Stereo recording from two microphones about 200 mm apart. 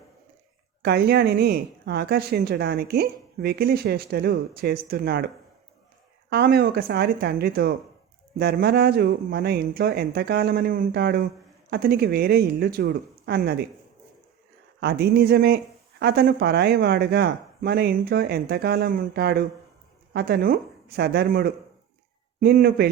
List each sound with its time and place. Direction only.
0.8 s speech: 55° right (ahead or behind)
6.3 s speech: 55° right (ahead or behind)
14.8 s speech: 55° right (ahead or behind)